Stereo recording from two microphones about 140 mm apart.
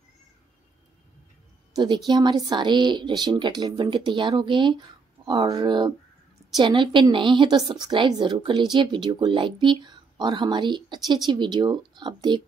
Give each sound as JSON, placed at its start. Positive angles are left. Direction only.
{"t": 2.0, "sound": "a woman's voice", "side_deg": -30}